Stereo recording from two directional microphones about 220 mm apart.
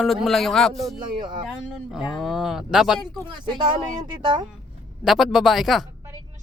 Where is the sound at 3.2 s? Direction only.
20° right (ahead or behind).